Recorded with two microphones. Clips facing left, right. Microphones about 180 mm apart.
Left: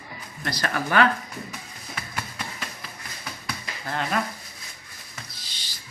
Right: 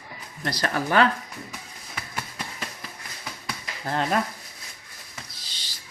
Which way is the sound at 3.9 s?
35° right (ahead or behind).